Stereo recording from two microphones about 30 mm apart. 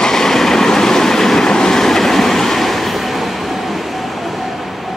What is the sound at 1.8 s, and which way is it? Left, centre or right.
Train, centre.